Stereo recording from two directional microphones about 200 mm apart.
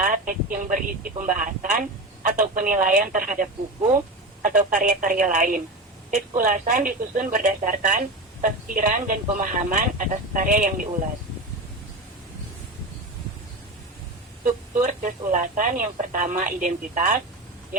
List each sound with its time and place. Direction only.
0.0 s speech: 40° right (ahead or behind)
4.4 s speech: 40° right (ahead or behind)
14.4 s speech: 40° right (ahead or behind)